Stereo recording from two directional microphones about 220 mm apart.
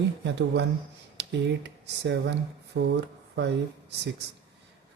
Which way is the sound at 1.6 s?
50° right (ahead or behind).